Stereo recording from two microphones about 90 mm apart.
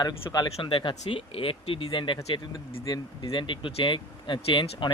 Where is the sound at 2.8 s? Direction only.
50° left (ahead or behind).